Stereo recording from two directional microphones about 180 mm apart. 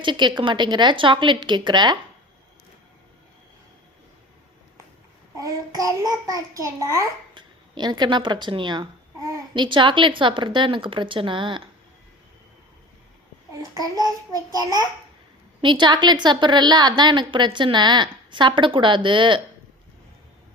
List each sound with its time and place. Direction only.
0.0 s a woman's voice: 25° right (ahead or behind)
5.4 s a woman's voice: 20° right (ahead or behind)
13.5 s a child's voice: 20° right (ahead or behind)
15.6 s a woman's voice: 25° right (ahead or behind)